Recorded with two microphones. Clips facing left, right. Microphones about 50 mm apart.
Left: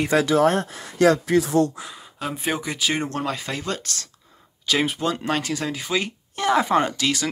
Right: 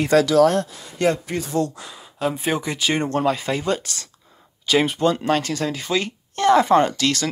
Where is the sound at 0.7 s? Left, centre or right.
Left.